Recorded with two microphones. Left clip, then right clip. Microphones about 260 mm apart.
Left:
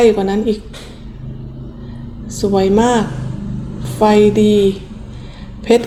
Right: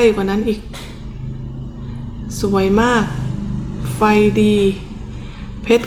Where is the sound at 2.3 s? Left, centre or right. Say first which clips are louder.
Left 2 dB; centre.